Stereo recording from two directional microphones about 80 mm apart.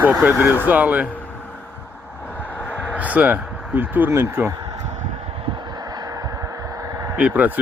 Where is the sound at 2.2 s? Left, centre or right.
Left.